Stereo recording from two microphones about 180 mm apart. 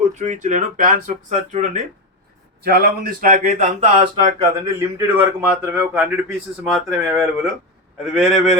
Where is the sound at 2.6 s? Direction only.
60° right (ahead or behind); by 4.3 s 40° right (ahead or behind).